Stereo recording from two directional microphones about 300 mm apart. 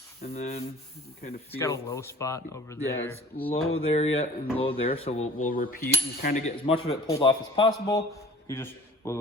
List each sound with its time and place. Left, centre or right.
0.2 s coin: left
1.5 s speech: centre
3.7 s coin: centre